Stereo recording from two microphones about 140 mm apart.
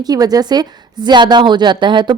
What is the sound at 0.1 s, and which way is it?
A woman's voice, 25° right (ahead or behind).